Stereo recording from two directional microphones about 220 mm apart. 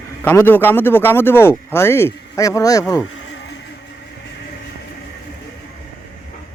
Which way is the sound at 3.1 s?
55° left (ahead or behind).